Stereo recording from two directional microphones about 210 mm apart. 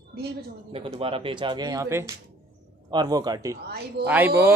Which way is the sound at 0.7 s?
25° right (ahead or behind).